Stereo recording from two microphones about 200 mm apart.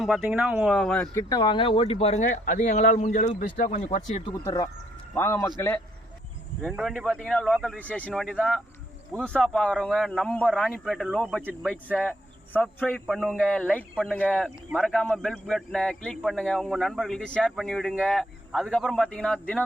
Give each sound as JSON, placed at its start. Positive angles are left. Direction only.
{"t": 0.0, "sound": "speech", "side_deg": -5}
{"t": 1.3, "sound": "speech", "side_deg": 20}
{"t": 4.3, "sound": "a man's voice", "side_deg": 15}
{"t": 6.6, "sound": "speech", "side_deg": 0}